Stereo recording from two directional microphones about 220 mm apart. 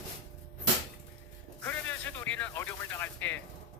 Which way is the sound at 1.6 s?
10° left (ahead or behind).